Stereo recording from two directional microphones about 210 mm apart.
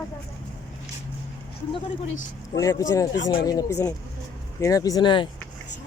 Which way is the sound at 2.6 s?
15° left (ahead or behind).